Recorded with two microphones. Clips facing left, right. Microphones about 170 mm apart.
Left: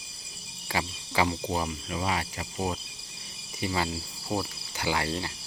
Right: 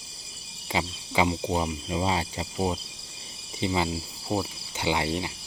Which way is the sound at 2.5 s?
15° right (ahead or behind).